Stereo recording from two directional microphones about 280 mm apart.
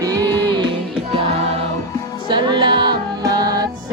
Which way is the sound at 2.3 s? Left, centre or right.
Centre.